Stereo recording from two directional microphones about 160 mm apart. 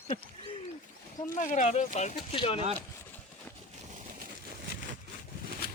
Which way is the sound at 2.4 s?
35° left (ahead or behind).